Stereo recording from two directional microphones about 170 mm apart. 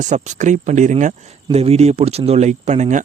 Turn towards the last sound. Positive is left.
turn(degrees=-45)  # may be behind; listen again after turning